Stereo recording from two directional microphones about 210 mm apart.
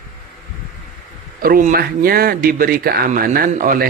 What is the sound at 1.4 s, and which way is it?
Speech, 40° right (ahead or behind).